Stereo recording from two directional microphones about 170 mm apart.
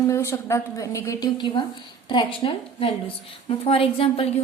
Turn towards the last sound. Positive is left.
turn(degrees=35)  # may be behind; listen again after turning